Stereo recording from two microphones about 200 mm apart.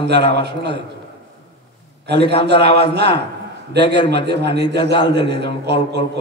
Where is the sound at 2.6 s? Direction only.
25° left (ahead or behind).